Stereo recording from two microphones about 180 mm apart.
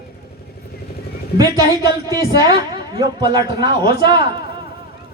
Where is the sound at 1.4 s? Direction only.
20° right (ahead or behind).